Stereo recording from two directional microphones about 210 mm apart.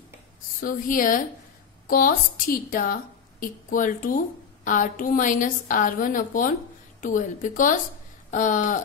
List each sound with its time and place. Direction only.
0.6 s a woman's voice: 40° left (ahead or behind)